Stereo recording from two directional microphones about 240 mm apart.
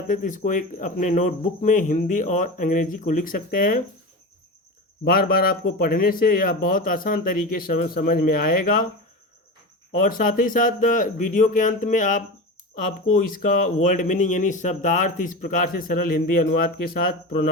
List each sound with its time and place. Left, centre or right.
0.1 s speech: left
5.0 s speech: left
9.9 s speech: left